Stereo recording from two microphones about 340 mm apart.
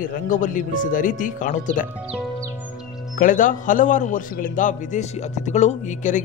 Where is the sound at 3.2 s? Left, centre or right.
Left.